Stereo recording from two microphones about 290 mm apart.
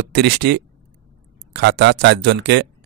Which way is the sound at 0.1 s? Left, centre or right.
Right.